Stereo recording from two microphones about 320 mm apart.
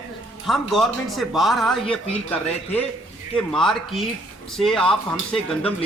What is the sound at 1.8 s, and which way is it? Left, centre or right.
Speech, centre.